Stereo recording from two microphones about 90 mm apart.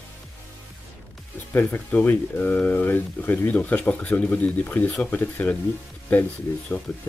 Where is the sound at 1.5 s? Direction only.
20° left (ahead or behind).